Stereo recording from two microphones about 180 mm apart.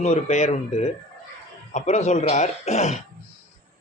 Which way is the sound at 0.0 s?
40° left (ahead or behind).